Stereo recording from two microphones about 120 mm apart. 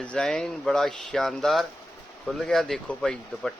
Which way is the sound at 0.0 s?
10° left (ahead or behind).